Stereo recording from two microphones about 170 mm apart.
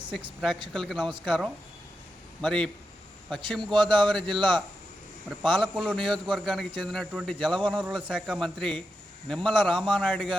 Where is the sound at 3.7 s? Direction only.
25° right (ahead or behind).